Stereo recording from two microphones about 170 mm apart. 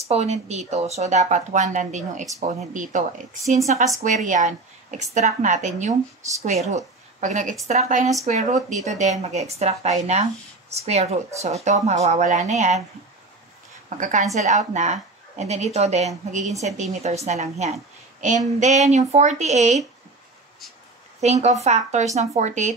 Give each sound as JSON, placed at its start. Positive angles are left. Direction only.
{"t": 0.1, "sound": "a woman's voice", "side_deg": -40}
{"t": 13.8, "sound": "a woman's voice", "side_deg": -50}
{"t": 21.2, "sound": "speech", "side_deg": -40}